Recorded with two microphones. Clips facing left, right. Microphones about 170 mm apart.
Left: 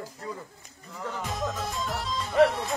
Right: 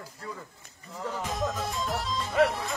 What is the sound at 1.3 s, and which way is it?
Music, centre (ahead or behind).